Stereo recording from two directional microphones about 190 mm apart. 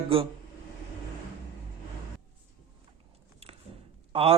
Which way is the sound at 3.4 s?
30° right (ahead or behind).